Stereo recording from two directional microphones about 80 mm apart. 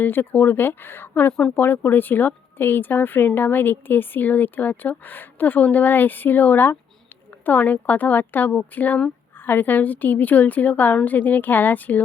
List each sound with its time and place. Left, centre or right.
0.0 s speech: left